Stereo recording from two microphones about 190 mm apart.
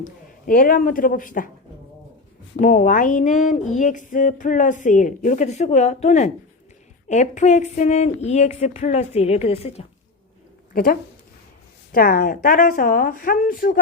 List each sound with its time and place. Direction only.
0.0 s speech: 50° left (ahead or behind)
2.6 s a sound: 45° left (ahead or behind)
11.9 s speech: 50° left (ahead or behind)